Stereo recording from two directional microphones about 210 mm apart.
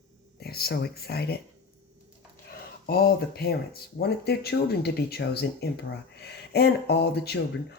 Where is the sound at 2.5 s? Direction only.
45° left (ahead or behind).